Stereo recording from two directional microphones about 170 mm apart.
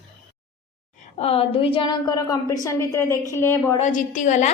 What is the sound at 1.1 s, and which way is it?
A woman's voice, 35° left (ahead or behind).